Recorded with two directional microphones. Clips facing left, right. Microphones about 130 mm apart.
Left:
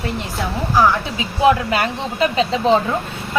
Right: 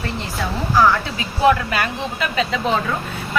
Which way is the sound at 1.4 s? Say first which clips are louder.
Left 1 dB; 25° left (ahead or behind).